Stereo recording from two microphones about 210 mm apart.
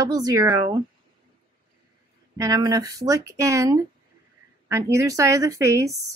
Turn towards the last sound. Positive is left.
turn(degrees=-15)  # may be behind; listen again after turning